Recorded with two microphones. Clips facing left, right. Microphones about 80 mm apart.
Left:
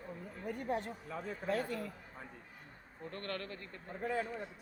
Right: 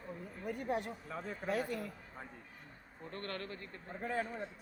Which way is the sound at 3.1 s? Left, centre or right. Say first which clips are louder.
Left 1 dB; right.